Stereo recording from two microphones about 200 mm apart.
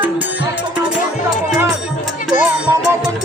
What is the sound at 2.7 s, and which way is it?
Music, 15° right (ahead or behind).